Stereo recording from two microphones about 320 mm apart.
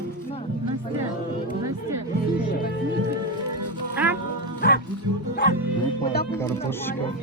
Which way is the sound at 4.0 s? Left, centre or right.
Centre.